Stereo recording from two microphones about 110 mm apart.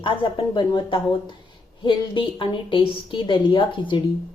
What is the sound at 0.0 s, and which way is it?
Speech, 45° left (ahead or behind).